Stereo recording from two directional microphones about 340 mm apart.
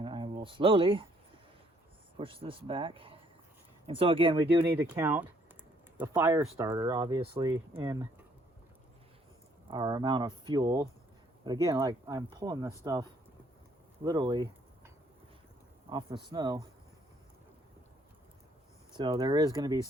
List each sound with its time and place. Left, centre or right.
0.0 s a sound: centre
2.1 s speech: centre
9.6 s speech: centre
15.9 s speech: centre
18.9 s speech: centre